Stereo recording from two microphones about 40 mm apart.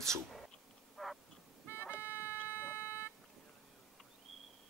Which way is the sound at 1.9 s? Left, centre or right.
Left.